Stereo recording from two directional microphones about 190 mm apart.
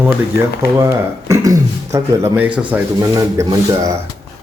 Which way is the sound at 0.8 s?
15° right (ahead or behind).